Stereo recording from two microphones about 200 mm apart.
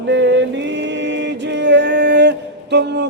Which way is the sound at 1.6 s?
60° right (ahead or behind).